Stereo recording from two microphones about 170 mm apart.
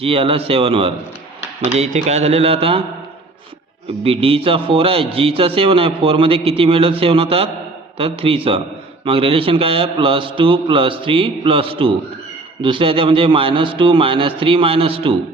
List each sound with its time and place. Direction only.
0.0 s a man's voice: 35° right (ahead or behind)
4.0 s a man's voice: 35° right (ahead or behind)